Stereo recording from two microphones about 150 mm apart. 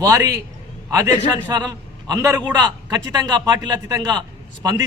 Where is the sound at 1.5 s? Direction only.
25° right (ahead or behind).